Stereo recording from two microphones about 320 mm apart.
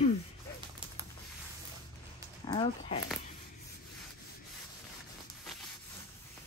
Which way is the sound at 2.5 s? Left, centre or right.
Centre.